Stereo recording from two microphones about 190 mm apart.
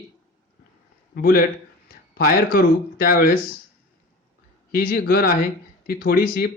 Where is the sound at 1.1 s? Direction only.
55° left (ahead or behind).